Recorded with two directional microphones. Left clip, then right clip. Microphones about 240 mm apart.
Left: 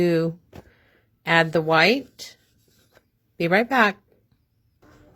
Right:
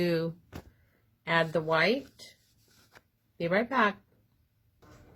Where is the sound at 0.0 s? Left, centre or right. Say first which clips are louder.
Left 8 dB; left.